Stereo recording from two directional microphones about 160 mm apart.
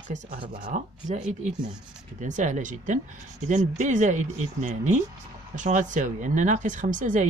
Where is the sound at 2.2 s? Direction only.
50° right (ahead or behind).